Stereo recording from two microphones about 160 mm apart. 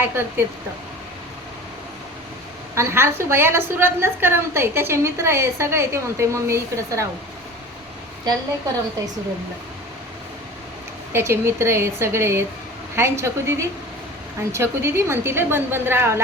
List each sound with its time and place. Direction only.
0.0 s a woman's voice: 15° right (ahead or behind)
2.7 s a woman's voice: 15° right (ahead or behind)
11.1 s a woman's voice: 15° right (ahead or behind)